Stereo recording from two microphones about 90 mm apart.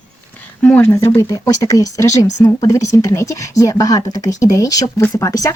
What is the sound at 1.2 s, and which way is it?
Speech, 40° left (ahead or behind).